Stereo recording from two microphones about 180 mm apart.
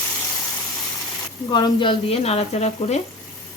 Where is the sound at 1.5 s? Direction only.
25° left (ahead or behind).